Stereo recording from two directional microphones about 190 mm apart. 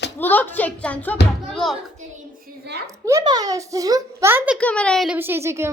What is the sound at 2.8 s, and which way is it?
A child's voice, 15° right (ahead or behind).